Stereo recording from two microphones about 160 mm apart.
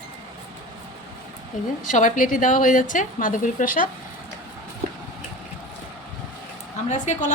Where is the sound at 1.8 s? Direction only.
55° left (ahead or behind).